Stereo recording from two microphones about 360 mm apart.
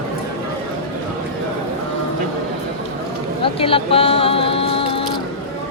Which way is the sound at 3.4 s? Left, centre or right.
Centre.